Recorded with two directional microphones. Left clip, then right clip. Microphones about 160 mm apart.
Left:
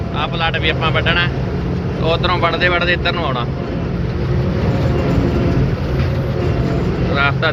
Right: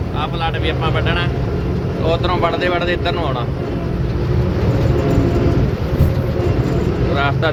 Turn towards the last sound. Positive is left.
turn(degrees=-30)  # may be behind; listen again after turning